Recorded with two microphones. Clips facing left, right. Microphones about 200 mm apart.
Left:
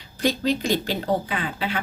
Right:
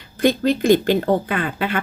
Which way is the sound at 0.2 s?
55° right (ahead or behind).